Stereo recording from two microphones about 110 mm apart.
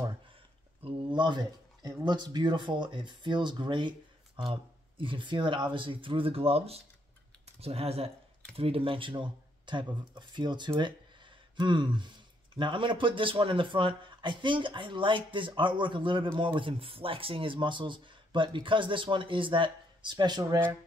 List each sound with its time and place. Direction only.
0.8 s speech: 45° right (ahead or behind)